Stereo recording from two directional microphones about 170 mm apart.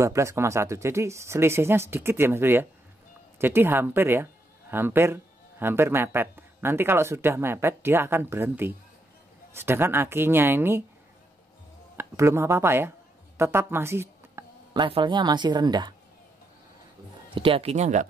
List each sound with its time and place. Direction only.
0.0 s speech: 15° right (ahead or behind)
12.0 s speech: 15° right (ahead or behind)
13.4 s a sound: 15° right (ahead or behind)
14.8 s speech: 30° right (ahead or behind)
17.3 s speech: 30° right (ahead or behind)